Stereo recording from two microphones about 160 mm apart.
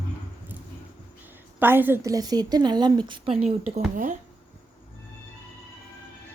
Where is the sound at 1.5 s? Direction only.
10° right (ahead or behind); by 3.3 s 30° right (ahead or behind).